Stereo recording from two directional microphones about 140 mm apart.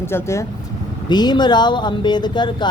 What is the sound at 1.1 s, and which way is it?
Speech, 30° left (ahead or behind).